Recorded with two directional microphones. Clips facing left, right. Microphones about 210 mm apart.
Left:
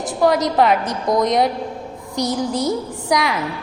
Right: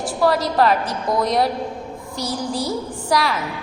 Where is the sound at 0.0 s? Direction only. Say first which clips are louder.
Left 2 dB; 20° left (ahead or behind).